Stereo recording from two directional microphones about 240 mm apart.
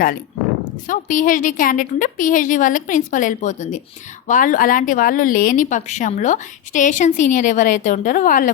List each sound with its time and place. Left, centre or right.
0.6 s a woman's voice: left